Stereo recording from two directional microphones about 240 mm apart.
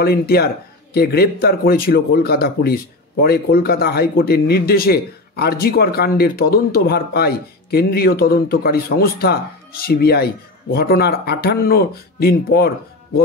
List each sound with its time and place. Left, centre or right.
0.0 s speech: left